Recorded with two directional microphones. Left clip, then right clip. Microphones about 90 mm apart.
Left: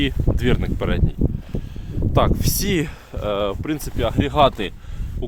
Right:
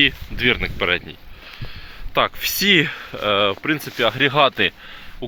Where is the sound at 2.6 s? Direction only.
25° left (ahead or behind); by 3.9 s 40° left (ahead or behind).